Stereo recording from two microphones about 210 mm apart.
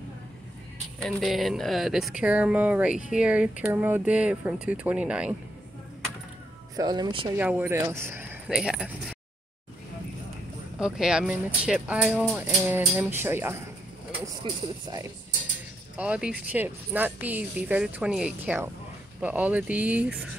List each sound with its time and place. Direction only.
1.0 s speech: centre (ahead or behind)
6.8 s speech: 20° right (ahead or behind)
7.3 s speech: 10° right (ahead or behind)
10.8 s speech: 5° right (ahead or behind); by 15.0 s 20° right (ahead or behind)
16.0 s speech: 5° right (ahead or behind)